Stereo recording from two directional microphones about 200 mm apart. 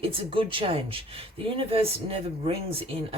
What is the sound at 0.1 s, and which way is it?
Speech, 25° right (ahead or behind).